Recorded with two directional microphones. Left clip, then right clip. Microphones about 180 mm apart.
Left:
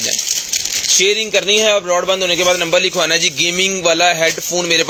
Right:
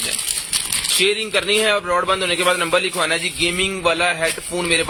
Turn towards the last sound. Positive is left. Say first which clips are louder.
# left 4 dB
turn(degrees=20)  # may be behind; listen again after turning